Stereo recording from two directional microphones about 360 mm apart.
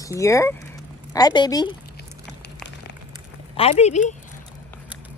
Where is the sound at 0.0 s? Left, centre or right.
Centre.